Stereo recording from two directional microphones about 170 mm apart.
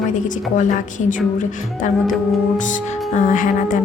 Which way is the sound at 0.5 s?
50° left (ahead or behind).